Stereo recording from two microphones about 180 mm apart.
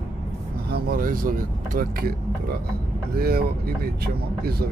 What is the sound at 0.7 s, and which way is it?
Speech, 55° right (ahead or behind).